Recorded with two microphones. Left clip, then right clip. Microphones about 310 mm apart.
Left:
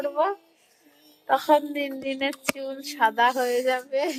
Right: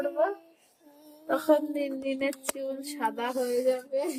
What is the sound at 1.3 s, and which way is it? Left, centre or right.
Speech, centre.